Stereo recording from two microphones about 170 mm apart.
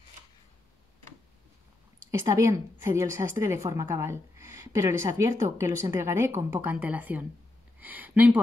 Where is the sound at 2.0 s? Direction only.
20° right (ahead or behind).